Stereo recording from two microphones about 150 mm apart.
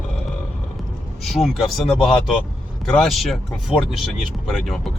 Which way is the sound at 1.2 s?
Centre (ahead or behind).